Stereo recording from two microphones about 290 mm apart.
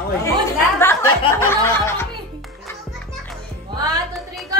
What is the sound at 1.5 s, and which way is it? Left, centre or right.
Music, centre.